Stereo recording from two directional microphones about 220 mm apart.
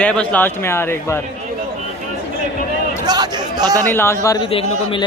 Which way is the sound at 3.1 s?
20° right (ahead or behind).